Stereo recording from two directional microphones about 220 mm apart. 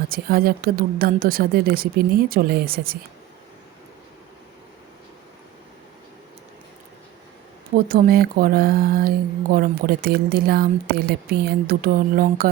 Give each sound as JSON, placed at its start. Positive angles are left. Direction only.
{"t": 0.1, "sound": "a woman's voice", "side_deg": -45}
{"t": 7.9, "sound": "speech", "side_deg": -40}